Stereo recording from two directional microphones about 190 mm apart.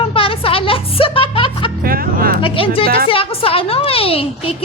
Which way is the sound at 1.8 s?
50° right (ahead or behind).